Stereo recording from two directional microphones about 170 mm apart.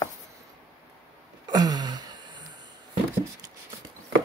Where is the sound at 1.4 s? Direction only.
25° right (ahead or behind).